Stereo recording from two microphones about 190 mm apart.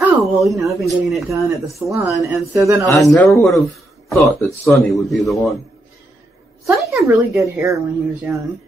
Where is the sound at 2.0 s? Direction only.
15° right (ahead or behind).